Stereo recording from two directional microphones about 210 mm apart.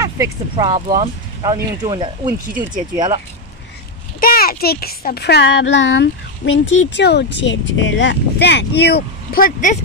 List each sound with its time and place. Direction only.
0.0 s speech: 15° right (ahead or behind)
4.2 s a child's voice: 45° left (ahead or behind)